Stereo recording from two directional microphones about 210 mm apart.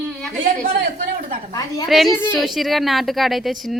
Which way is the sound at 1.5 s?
15° left (ahead or behind).